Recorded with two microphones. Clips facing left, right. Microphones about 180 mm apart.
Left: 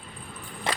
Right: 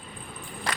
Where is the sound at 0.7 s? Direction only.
25° left (ahead or behind).